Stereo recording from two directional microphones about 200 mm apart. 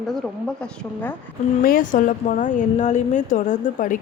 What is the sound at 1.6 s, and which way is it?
A woman's voice, 45° left (ahead or behind).